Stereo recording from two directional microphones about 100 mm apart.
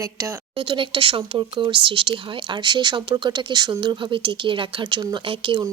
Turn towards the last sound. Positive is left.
turn(degrees=-55)  # may be behind; listen again after turning